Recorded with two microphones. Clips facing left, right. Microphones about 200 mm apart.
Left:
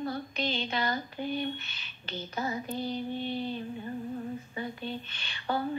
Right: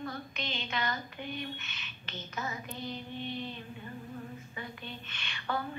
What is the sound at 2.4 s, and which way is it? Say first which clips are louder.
Child singing: left 6 dB; 35° left (ahead or behind).